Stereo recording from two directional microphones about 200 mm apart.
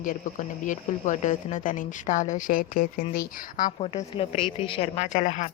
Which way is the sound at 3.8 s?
30° left (ahead or behind).